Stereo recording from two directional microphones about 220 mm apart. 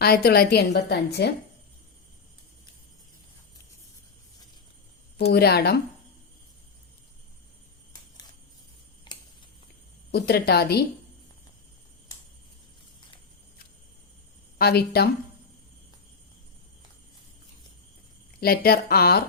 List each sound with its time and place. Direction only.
0.0 s a woman's voice: 45° left (ahead or behind)
5.3 s a woman's voice: 45° left (ahead or behind)
9.1 s a sound: 20° left (ahead or behind)
10.1 s a woman's voice: 45° left (ahead or behind)
14.6 s a woman's voice: 45° left (ahead or behind)
18.3 s a woman's voice: 45° left (ahead or behind)